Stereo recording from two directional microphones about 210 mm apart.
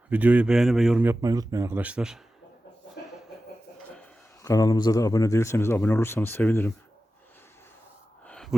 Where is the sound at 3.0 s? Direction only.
50° left (ahead or behind).